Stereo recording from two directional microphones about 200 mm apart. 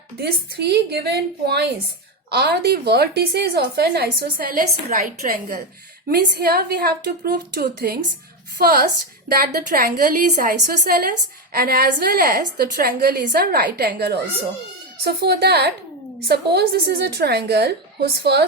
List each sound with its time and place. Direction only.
0.2 s a woman's voice: 55° right (ahead or behind)